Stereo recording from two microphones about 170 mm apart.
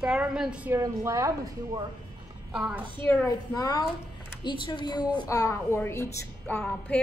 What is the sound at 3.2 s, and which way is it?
A woman's voice, 20° left (ahead or behind).